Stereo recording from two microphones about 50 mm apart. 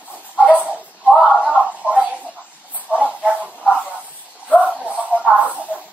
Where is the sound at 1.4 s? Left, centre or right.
Right.